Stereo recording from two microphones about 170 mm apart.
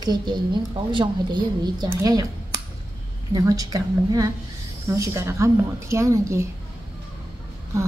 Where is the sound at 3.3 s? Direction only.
20° right (ahead or behind).